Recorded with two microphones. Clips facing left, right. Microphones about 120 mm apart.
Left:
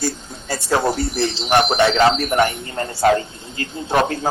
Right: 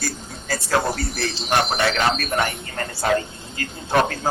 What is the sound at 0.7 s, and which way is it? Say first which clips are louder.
A woman's voice: left 4 dB; 25° left (ahead or behind).